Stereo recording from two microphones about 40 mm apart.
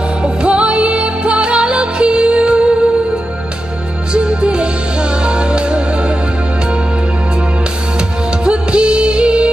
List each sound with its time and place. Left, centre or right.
0.2 s music: right
4.1 s music: right
8.5 s music: right